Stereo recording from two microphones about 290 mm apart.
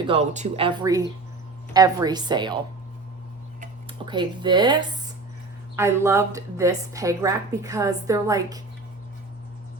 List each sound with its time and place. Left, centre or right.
0.1 s a woman's voice: right
3.6 s a woman's voice: centre